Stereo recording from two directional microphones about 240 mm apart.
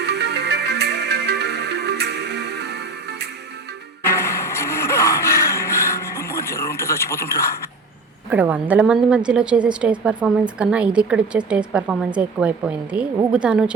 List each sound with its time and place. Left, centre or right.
0.0 s music: right
4.1 s a sound: centre
8.3 s a woman's voice: centre